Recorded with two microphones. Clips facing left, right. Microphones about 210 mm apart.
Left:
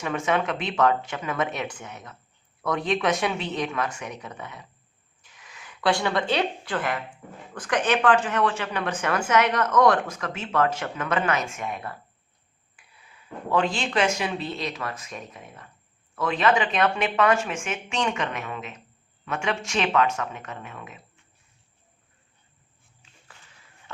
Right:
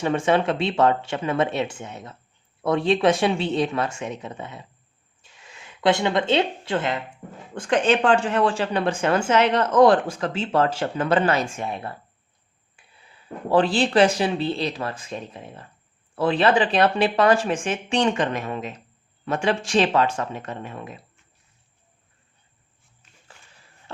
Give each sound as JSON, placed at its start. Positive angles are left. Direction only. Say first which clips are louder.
{"t": 0.0, "sound": "speech", "louder": "right 5 dB", "side_deg": -30}